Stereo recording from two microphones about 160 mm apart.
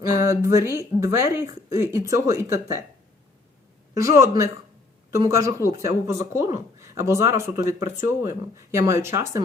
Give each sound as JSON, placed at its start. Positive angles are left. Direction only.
{"t": 0.3, "sound": "speech", "side_deg": -20}
{"t": 3.9, "sound": "a woman's voice", "side_deg": -20}